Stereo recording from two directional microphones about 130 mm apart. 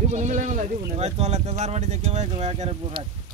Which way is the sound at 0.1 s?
65° right (ahead or behind).